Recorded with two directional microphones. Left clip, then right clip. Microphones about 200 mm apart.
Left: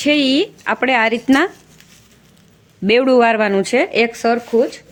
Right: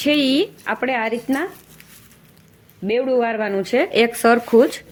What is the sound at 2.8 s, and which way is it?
Speech, 30° left (ahead or behind).